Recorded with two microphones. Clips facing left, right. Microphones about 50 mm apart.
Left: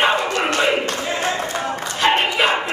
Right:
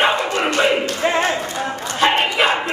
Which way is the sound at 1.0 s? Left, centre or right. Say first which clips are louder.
Right 6 dB; right.